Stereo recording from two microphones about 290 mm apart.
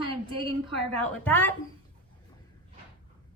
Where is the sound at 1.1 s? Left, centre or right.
Centre.